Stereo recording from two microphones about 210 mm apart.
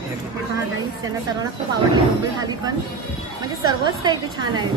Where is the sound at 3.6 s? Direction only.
20° right (ahead or behind).